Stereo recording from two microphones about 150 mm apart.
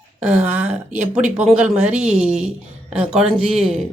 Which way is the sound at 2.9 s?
5° right (ahead or behind).